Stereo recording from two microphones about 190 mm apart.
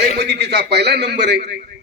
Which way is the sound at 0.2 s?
60° right (ahead or behind).